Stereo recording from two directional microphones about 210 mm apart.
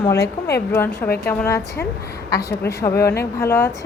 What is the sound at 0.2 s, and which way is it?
Speech, 50° left (ahead or behind).